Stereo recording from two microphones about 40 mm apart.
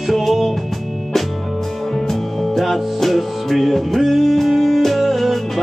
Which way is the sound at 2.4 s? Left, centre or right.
Centre.